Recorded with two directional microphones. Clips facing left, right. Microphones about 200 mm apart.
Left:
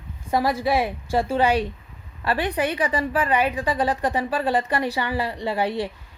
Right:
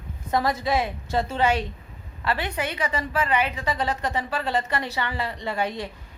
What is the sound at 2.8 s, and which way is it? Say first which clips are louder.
A woman's voice: left 3 dB; 35° left (ahead or behind).